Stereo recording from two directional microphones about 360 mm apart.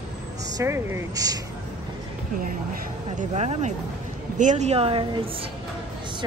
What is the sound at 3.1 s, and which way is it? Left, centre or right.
Speech, centre.